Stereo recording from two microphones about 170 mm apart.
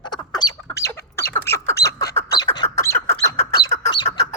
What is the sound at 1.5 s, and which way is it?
Squawk, 70° left (ahead or behind).